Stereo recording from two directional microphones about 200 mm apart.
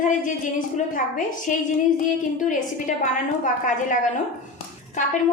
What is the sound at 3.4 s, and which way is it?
Speech, 40° left (ahead or behind).